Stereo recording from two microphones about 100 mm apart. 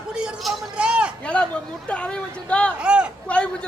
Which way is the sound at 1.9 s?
10° left (ahead or behind).